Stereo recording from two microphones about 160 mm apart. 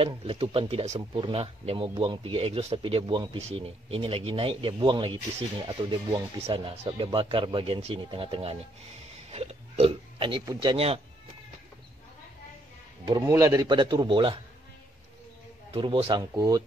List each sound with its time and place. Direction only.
0.0 s a man's voice: 35° right (ahead or behind)
13.0 s a man's voice: 25° right (ahead or behind)
15.7 s a man's voice: 35° right (ahead or behind)